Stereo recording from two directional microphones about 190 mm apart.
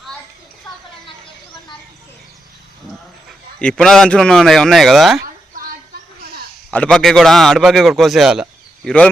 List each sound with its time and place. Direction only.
3.6 s a man's voice: 5° left (ahead or behind)
5.2 s a sound: 50° right (ahead or behind)
6.7 s a man's voice: 5° left (ahead or behind)